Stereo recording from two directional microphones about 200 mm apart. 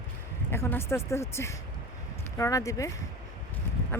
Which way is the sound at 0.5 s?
10° left (ahead or behind).